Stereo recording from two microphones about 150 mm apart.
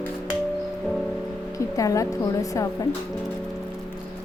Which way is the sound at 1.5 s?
20° left (ahead or behind).